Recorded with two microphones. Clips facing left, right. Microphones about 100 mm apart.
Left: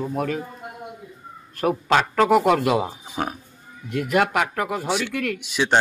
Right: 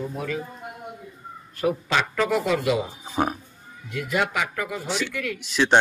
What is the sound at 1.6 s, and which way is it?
Speech, 55° left (ahead or behind).